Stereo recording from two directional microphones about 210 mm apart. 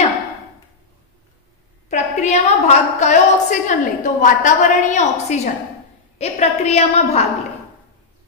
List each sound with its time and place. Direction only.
1.9 s a woman's voice: 35° left (ahead or behind)